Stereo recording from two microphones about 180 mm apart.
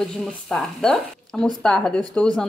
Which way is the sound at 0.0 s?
Centre (ahead or behind).